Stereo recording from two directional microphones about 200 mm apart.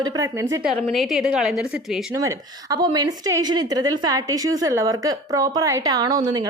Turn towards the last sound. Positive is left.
turn(degrees=-20)  # may be behind; listen again after turning